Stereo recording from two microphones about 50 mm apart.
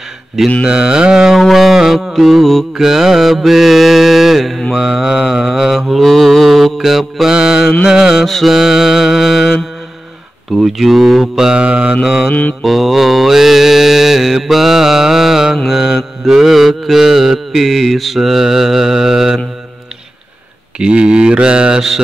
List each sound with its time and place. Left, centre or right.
0.7 s mantra: centre
1.4 s a sound: centre
2.1 s mantra: centre
10.5 s speech: centre
11.4 s mantra: right
12.0 s mantra: centre
12.3 s mantra: left
12.6 s mantra: centre
20.8 s mantra: centre